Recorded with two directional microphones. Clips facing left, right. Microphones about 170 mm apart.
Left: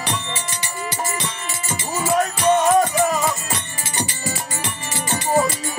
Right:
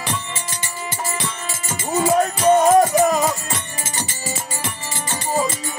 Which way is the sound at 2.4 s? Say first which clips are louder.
Right 3 dB; 40° right (ahead or behind).